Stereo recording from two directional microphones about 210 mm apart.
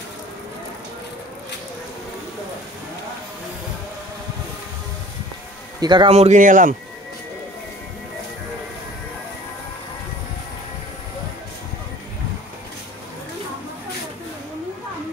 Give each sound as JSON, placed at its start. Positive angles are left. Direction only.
{"t": 5.8, "sound": "speech", "side_deg": -20}